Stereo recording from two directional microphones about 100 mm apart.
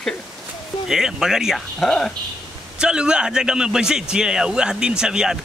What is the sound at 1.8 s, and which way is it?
Speech, 5° left (ahead or behind).